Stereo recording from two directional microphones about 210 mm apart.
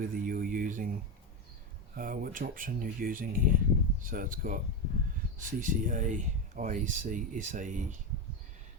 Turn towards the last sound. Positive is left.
turn(degrees=-35)  # may be behind; listen again after turning